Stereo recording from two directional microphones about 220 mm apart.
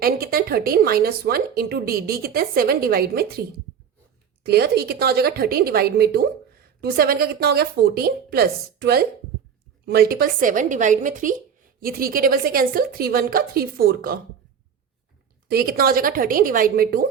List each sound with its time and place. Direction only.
0.0 s a woman's voice: 45° right (ahead or behind)
4.4 s a woman's voice: 45° right (ahead or behind)
15.4 s a woman's voice: 45° right (ahead or behind)